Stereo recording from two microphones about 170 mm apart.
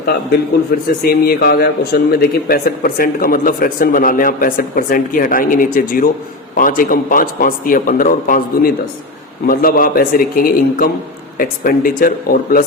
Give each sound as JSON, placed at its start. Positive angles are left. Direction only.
{"t": 0.7, "sound": "a man's voice", "side_deg": 65}